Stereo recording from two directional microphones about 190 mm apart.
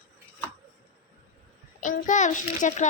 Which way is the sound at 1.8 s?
40° left (ahead or behind).